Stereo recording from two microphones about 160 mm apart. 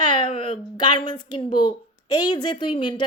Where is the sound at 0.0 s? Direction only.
30° left (ahead or behind).